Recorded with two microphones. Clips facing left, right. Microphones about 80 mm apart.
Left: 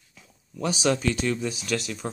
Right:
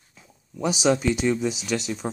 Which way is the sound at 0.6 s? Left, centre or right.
Centre.